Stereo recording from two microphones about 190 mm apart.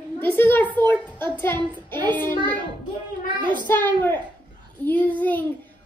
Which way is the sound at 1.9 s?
25° right (ahead or behind).